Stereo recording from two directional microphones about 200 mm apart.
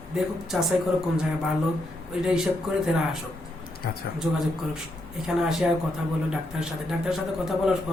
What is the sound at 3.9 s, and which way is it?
Speech, 50° left (ahead or behind).